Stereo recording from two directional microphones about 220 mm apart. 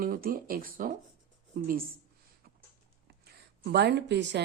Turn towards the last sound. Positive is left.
turn(degrees=-50)  # may be behind; listen again after turning